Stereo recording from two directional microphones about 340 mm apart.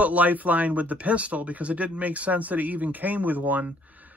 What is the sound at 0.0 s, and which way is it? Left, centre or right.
Speech, centre.